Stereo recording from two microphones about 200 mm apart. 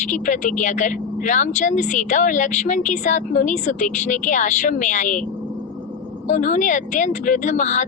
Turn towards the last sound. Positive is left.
turn(degrees=40)  # may be behind; listen again after turning